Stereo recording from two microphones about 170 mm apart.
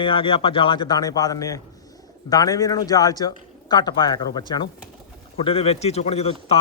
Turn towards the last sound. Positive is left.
turn(degrees=40)  # may be behind; listen again after turning